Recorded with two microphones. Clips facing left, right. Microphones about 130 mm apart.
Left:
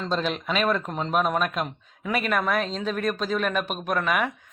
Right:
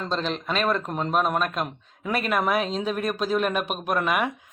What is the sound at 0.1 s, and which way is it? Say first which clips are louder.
Speech: left 1 dB; 5° left (ahead or behind).